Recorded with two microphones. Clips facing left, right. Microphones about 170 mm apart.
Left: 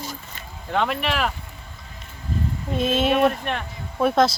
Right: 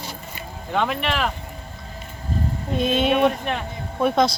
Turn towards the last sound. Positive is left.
turn(degrees=0)  # may be behind; listen again after turning